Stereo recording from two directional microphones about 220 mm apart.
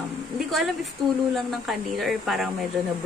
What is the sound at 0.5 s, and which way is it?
Speech, centre (ahead or behind).